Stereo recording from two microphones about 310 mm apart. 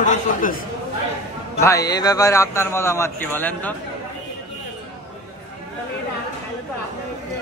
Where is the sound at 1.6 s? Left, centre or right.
Centre.